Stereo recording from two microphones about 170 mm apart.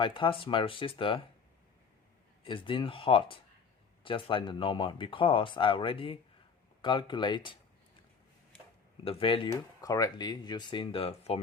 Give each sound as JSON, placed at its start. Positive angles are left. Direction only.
{"t": 0.0, "sound": "speech", "side_deg": 30}
{"t": 2.4, "sound": "speech", "side_deg": 30}
{"t": 9.0, "sound": "speech", "side_deg": 30}